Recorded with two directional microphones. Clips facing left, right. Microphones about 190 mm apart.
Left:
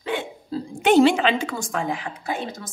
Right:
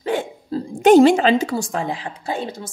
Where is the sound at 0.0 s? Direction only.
40° right (ahead or behind).